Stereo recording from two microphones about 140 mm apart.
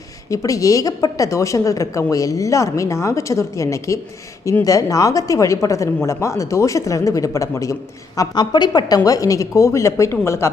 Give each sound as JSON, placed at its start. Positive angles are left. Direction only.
{"t": 0.3, "sound": "a woman's voice", "side_deg": 25}